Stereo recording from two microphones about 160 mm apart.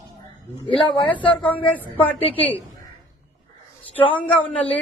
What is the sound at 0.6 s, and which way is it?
Speech, 30° left (ahead or behind).